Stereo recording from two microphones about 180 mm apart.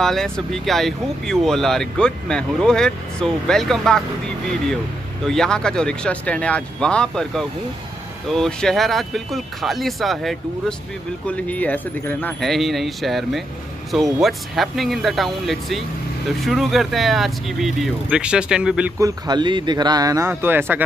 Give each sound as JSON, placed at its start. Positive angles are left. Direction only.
{"t": 0.0, "sound": "speech", "side_deg": 0}
{"t": 5.2, "sound": "speech", "side_deg": 5}
{"t": 18.9, "sound": "a man's voice", "side_deg": -20}